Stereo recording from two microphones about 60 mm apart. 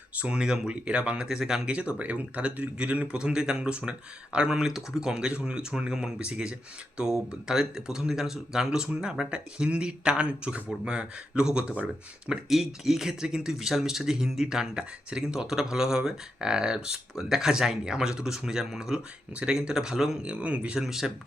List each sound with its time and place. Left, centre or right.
0.2 s speech: centre
12.3 s speech: centre; by 20.7 s right
20.7 s speech: centre